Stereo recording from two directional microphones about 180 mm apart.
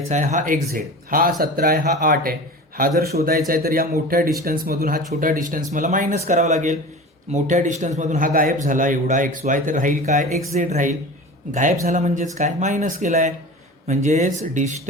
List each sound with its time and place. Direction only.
0.1 s a man's voice: 40° right (ahead or behind)